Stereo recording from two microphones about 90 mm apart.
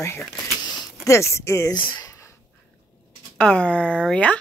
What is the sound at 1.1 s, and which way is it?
Speech, 30° left (ahead or behind).